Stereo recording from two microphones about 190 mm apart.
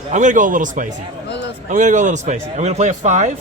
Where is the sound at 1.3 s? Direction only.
65° left (ahead or behind).